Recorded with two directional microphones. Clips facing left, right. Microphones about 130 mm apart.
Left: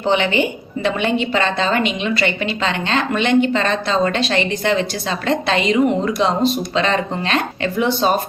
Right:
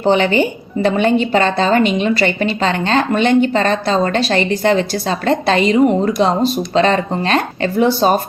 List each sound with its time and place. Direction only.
0.0 s a woman's voice: 40° right (ahead or behind)